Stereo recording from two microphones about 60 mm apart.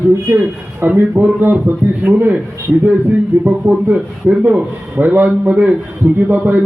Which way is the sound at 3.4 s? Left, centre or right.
Right.